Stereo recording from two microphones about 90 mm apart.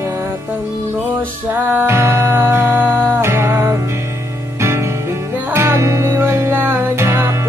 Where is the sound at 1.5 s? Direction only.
20° right (ahead or behind).